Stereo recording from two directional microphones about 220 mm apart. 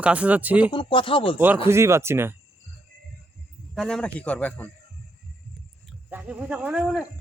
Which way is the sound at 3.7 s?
Centre (ahead or behind).